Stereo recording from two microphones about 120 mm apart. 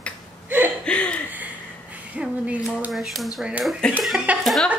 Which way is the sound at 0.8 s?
10° left (ahead or behind).